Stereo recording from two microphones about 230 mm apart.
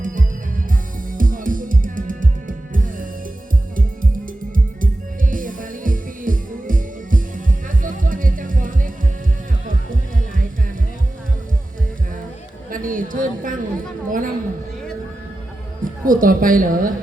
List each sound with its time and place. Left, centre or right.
0.0 s music: right
4.5 s music: right
12.7 s a sound: right
15.8 s a woman's voice: right